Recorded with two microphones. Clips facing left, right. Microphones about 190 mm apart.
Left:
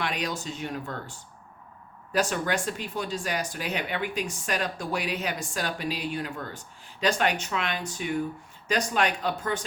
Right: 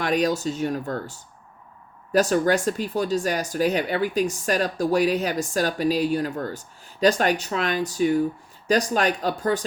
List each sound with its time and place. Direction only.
0.0 s speech: 40° right (ahead or behind)